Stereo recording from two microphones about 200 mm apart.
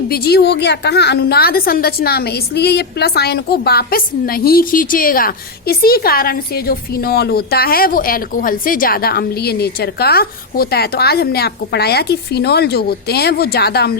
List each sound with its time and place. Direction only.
0.1 s a woman's voice: 50° left (ahead or behind)